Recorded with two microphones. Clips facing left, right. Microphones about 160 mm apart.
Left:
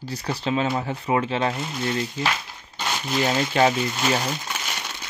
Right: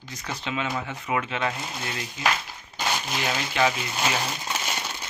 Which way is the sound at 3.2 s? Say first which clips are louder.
Left 6 dB; 40° left (ahead or behind).